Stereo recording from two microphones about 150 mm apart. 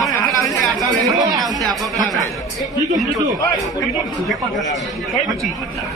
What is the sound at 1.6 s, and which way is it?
Speech, centre (ahead or behind).